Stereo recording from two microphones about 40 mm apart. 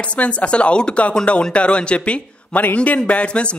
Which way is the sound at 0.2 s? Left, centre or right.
Left.